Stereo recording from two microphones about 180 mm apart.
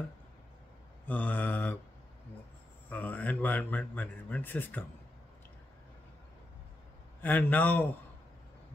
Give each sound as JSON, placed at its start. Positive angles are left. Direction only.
{"t": 1.0, "sound": "a man's voice", "side_deg": 10}
{"t": 2.9, "sound": "a man's voice", "side_deg": 10}
{"t": 7.2, "sound": "a man's voice", "side_deg": 10}